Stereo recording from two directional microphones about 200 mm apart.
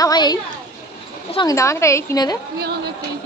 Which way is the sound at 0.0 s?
20° left (ahead or behind).